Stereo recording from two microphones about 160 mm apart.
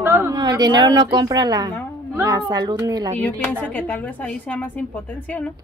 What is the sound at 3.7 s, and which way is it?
A woman's voice, 10° left (ahead or behind).